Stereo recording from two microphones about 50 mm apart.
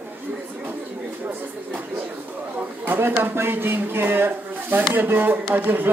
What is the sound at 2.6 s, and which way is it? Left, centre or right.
Speech, right.